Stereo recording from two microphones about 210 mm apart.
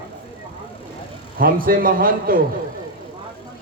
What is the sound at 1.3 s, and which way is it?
A man's voice, 45° right (ahead or behind).